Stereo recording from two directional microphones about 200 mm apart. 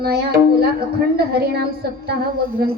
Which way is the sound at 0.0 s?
50° right (ahead or behind).